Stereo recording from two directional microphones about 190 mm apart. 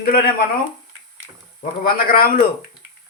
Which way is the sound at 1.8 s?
50° left (ahead or behind).